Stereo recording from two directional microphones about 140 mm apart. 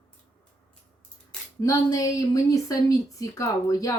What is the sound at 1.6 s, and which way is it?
Speech, 25° left (ahead or behind).